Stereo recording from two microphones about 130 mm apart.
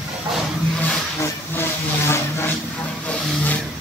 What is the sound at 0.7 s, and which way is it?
Vehicle, 10° left (ahead or behind).